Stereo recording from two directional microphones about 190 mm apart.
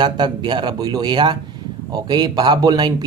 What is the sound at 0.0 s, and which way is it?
Speech, 25° right (ahead or behind).